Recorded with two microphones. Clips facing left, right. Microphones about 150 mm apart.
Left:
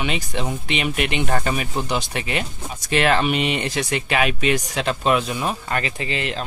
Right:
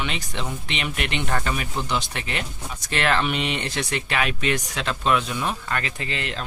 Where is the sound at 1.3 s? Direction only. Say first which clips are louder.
Left 3 dB; 25° left (ahead or behind).